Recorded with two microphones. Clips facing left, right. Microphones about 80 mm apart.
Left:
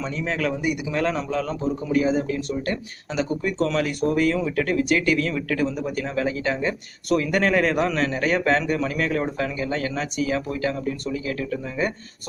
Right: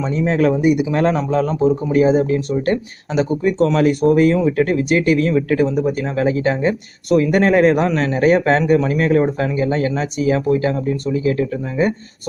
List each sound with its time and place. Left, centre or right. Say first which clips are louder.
0.0 s speech: right 9 dB; right
3.1 s speech: right 7 dB; right